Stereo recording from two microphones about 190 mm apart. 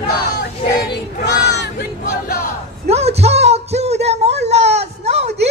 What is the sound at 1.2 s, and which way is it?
Speech, 60° left (ahead or behind).